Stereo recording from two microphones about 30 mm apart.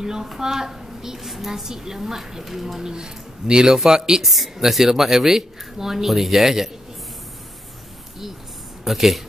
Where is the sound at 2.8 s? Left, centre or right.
Right.